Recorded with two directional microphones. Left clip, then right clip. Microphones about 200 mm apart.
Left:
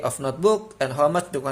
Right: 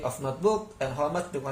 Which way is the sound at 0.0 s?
55° left (ahead or behind).